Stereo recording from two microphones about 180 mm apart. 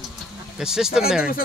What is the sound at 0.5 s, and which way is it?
Speech, 5° right (ahead or behind).